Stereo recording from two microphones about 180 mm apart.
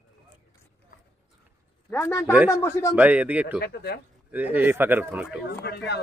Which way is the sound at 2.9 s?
10° right (ahead or behind).